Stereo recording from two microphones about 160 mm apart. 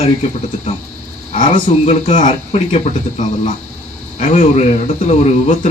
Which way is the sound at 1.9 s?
50° left (ahead or behind).